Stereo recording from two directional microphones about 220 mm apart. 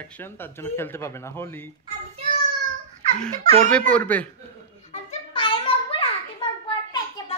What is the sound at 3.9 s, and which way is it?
Speech, 5° left (ahead or behind).